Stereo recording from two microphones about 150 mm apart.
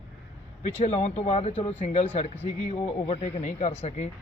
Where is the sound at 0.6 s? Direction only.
45° left (ahead or behind).